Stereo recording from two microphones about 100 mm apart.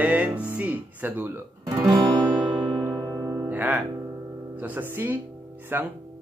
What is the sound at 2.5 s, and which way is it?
Music, 55° right (ahead or behind).